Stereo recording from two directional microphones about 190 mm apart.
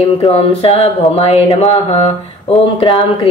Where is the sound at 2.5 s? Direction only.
30° left (ahead or behind).